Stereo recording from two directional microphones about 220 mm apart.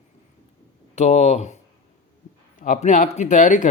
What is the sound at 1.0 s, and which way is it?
Speech, 30° left (ahead or behind).